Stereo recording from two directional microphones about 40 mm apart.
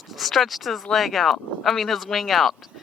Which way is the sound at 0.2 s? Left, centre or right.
Centre.